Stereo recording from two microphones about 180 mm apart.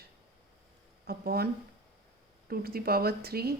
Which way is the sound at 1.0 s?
60° right (ahead or behind).